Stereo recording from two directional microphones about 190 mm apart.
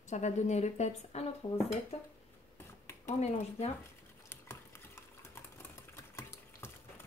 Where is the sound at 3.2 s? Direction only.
35° left (ahead or behind).